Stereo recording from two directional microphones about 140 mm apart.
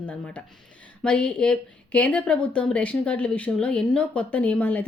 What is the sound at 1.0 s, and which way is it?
Speech, 5° left (ahead or behind).